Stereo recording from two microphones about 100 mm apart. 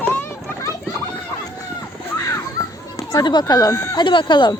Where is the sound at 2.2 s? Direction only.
30° left (ahead or behind).